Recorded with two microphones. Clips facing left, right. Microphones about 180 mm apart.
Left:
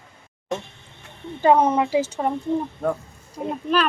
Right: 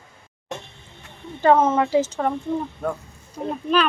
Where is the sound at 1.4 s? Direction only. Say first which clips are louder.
Even; 15° left (ahead or behind).